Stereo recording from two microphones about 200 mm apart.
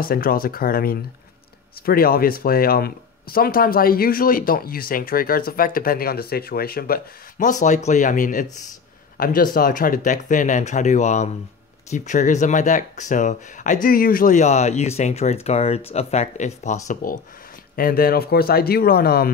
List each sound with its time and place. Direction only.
0.0 s speech: 45° left (ahead or behind)